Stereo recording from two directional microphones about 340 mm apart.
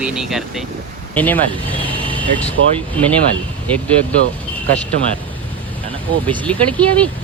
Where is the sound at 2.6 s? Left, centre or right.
Right.